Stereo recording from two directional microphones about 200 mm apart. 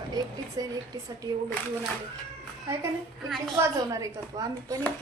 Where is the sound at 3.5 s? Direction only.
15° right (ahead or behind).